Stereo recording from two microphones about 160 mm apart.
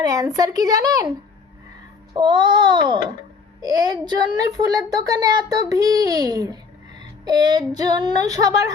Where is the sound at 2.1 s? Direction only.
30° right (ahead or behind).